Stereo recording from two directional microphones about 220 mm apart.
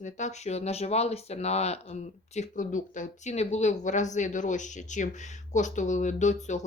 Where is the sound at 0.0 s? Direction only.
30° left (ahead or behind).